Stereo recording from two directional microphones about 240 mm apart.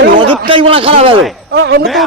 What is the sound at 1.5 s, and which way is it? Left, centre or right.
Speech, right.